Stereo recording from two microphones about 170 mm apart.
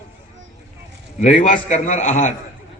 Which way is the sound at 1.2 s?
50° left (ahead or behind).